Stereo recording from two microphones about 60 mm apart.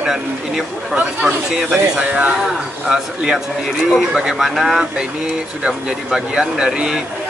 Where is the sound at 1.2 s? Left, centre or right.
Centre.